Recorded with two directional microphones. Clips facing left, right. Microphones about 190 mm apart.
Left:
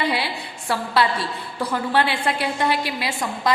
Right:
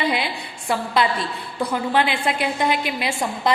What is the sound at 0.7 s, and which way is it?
A woman's voice, 15° right (ahead or behind).